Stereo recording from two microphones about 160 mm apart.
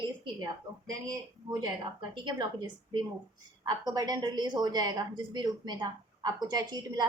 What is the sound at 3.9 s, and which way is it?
A woman's voice, 25° right (ahead or behind).